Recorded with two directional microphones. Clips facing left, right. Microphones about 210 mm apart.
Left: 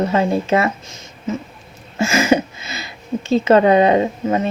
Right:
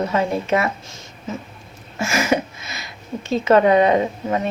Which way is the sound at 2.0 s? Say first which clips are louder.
Left 4 dB; 25° left (ahead or behind).